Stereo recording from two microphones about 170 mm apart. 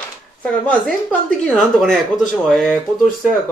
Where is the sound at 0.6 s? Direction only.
5° left (ahead or behind).